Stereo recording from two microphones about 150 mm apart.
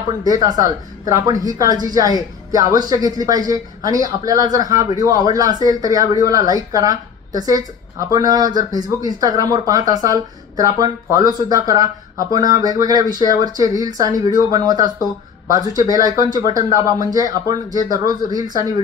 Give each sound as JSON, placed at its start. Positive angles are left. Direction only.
{"t": 0.2, "sound": "speech", "side_deg": -25}